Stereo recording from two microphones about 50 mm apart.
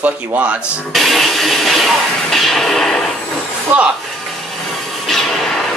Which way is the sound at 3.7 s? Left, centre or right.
Right.